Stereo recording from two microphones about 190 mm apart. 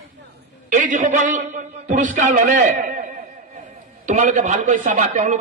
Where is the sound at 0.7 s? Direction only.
40° right (ahead or behind).